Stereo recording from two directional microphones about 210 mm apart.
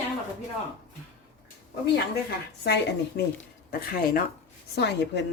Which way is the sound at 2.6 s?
55° left (ahead or behind).